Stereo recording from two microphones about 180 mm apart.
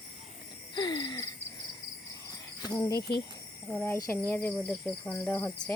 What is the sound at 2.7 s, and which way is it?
Speech, 10° left (ahead or behind).